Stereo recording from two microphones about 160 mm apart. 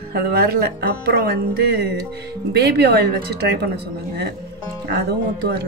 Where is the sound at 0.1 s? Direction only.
75° right (ahead or behind); by 3.0 s 90° right.